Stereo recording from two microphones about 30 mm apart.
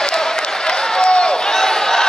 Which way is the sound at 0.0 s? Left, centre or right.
Left.